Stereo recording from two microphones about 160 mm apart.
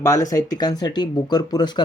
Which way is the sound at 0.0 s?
20° left (ahead or behind).